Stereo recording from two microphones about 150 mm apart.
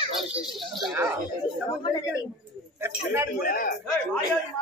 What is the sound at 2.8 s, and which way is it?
Speech, 15° right (ahead or behind).